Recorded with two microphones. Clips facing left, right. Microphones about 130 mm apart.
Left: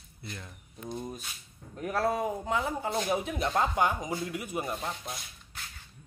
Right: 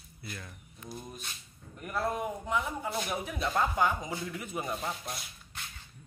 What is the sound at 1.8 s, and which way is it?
Speech, 90° left.